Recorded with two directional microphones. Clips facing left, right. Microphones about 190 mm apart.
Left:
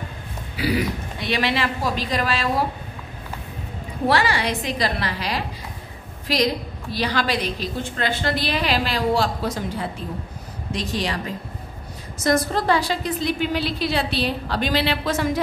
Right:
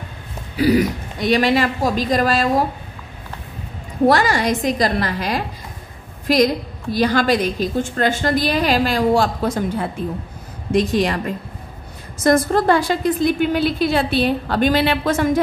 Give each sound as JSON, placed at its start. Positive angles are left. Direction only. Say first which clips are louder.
{"t": 0.6, "sound": "a woman's voice", "louder": "right 7 dB", "side_deg": -45}
{"t": 4.1, "sound": "a woman's voice", "louder": "right 2 dB", "side_deg": -45}